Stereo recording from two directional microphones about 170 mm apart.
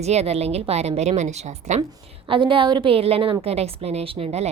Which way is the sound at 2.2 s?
30° right (ahead or behind).